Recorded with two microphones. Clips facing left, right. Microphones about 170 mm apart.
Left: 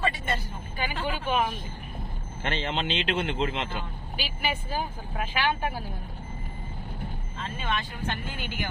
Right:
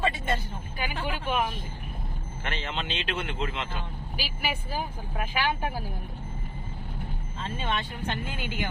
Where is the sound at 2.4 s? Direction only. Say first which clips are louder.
Left 5 dB; 30° left (ahead or behind).